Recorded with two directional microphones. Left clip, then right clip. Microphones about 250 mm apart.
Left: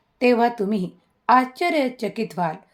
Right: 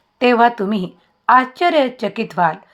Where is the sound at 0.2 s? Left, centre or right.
Centre.